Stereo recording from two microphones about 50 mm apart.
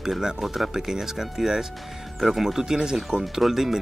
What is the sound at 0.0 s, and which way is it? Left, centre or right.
Speech, centre.